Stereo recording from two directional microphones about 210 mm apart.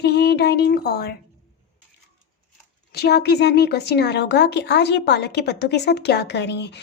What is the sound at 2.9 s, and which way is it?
Speech, 50° left (ahead or behind).